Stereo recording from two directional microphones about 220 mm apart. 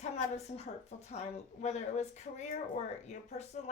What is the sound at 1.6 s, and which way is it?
A woman's voice, 30° left (ahead or behind).